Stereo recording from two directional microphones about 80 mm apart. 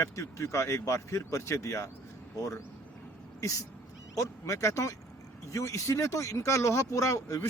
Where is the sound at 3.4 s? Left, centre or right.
Left.